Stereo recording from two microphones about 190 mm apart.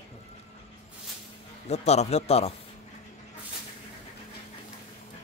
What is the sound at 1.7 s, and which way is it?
Speech, 35° left (ahead or behind).